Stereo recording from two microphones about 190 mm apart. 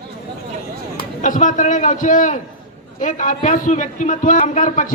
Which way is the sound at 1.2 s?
40° left (ahead or behind).